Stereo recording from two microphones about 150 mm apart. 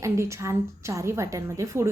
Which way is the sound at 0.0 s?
20° right (ahead or behind).